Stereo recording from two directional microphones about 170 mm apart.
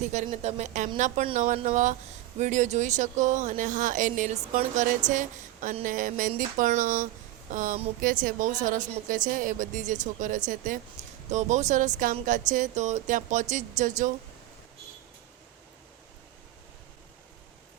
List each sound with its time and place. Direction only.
0.0 s speech: 45° right (ahead or behind)